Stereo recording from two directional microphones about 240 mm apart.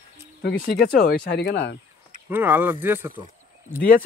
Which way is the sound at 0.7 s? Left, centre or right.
Left.